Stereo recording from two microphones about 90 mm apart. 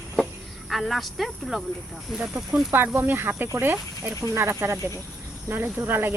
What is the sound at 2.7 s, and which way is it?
Speech, 25° right (ahead or behind).